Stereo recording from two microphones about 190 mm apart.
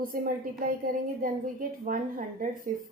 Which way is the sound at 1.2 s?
45° right (ahead or behind).